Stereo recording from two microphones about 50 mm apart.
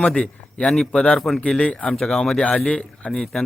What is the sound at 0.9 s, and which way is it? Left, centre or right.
A man's voice, left.